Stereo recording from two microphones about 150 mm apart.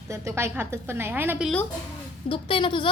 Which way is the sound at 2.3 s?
35° left (ahead or behind).